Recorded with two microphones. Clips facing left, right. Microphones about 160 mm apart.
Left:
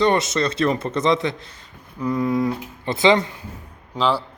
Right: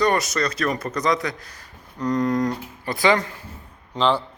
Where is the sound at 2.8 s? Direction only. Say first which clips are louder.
Left 3 dB; 25° left (ahead or behind).